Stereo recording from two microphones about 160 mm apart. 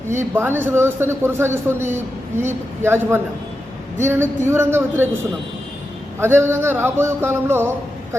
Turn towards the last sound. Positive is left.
turn(degrees=-15)  # may be behind; listen again after turning